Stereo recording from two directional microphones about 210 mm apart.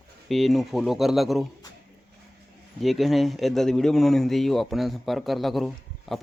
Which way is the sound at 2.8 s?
Centre (ahead or behind).